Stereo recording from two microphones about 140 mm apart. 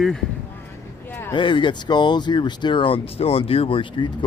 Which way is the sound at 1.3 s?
35° left (ahead or behind).